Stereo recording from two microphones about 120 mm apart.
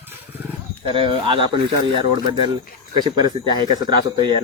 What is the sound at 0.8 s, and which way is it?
A man's voice, 45° right (ahead or behind).